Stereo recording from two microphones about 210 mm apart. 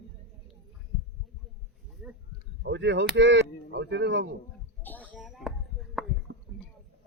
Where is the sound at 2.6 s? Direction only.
55° right (ahead or behind).